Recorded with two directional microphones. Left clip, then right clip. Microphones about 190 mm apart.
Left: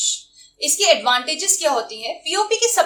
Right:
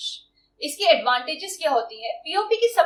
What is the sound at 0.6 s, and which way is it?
Speech, 15° left (ahead or behind).